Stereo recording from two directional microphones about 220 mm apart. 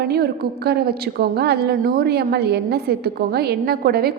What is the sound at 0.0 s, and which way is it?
A woman's voice, 45° right (ahead or behind).